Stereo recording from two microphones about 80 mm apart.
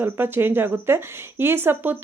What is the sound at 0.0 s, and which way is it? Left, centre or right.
Speech, right.